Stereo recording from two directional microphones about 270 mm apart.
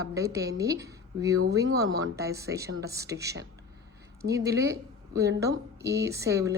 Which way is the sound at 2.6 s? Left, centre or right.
Right.